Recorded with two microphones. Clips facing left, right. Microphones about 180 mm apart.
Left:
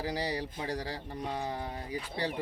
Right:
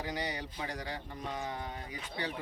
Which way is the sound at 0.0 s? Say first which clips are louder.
Left 4 dB; 35° left (ahead or behind).